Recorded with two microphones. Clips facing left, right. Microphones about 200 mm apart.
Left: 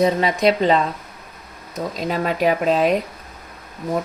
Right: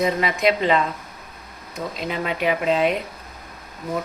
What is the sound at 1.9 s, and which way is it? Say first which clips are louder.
Speech: left 5 dB; 40° left (ahead or behind).